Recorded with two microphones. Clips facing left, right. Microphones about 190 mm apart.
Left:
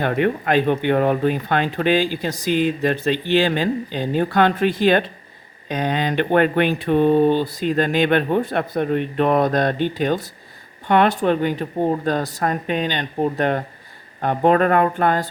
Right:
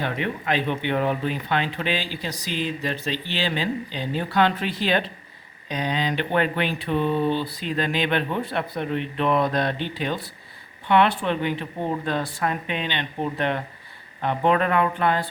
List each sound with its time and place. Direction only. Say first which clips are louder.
0.0 s speech: left 8 dB; 50° left (ahead or behind)